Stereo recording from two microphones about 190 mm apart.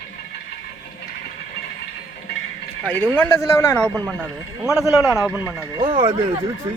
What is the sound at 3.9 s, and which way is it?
Speech, 10° right (ahead or behind).